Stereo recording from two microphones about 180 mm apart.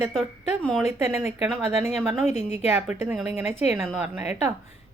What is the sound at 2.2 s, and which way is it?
Speech, 35° left (ahead or behind).